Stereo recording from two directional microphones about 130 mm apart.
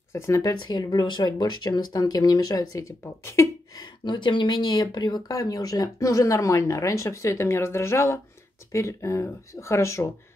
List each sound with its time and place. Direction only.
0.1 s speech: 25° left (ahead or behind)
4.0 s speech: 35° left (ahead or behind)